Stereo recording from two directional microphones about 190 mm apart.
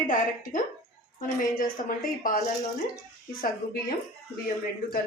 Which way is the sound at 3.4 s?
50° left (ahead or behind).